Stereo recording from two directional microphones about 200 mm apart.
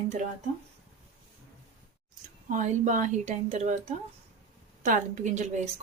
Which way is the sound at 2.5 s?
40° right (ahead or behind).